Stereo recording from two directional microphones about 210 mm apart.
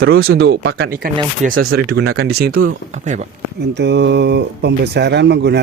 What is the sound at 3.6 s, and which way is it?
Speech, 55° right (ahead or behind).